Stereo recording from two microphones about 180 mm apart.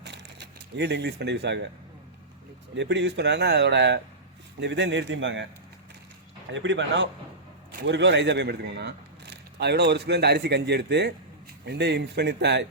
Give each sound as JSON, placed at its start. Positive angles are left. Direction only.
{"t": 0.0, "sound": "a sound", "side_deg": -70}
{"t": 2.7, "sound": "a man's voice", "side_deg": -80}
{"t": 6.5, "sound": "a man's voice", "side_deg": -90}